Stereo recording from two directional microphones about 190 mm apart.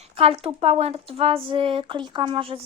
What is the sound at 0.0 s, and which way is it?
Speech, 30° right (ahead or behind).